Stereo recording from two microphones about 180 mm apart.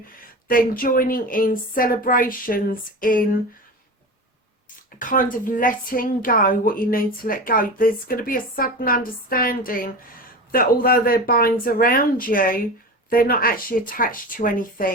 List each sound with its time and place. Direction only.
0.2 s a woman's voice: 50° left (ahead or behind)
4.9 s a woman's voice: 50° left (ahead or behind)